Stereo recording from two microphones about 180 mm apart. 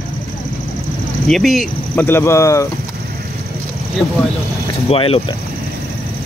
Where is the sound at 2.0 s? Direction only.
15° left (ahead or behind).